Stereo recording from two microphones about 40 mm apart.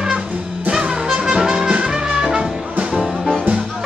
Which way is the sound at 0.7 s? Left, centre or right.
Right.